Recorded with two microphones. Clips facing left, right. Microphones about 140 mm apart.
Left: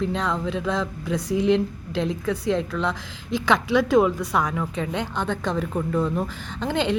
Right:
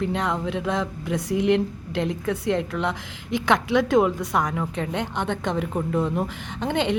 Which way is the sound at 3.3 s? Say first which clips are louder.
Even; 20° right (ahead or behind).